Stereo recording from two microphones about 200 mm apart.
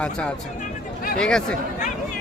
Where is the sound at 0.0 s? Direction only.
5° left (ahead or behind).